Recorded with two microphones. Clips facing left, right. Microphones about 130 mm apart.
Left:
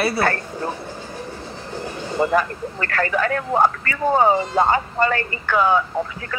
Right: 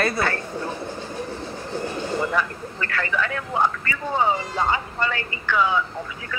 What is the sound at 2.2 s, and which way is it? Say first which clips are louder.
Speech: left 9 dB; 45° left (ahead or behind).